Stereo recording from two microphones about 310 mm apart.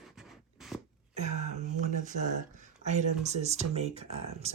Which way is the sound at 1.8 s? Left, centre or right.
Right.